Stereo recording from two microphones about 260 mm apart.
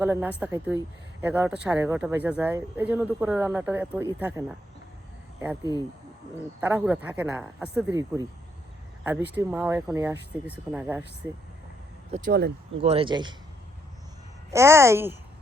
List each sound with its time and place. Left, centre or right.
0.0 s speech: centre
6.3 s speech: centre
9.3 s speech: centre
12.1 s speech: right
12.8 s speech: right
14.5 s speech: centre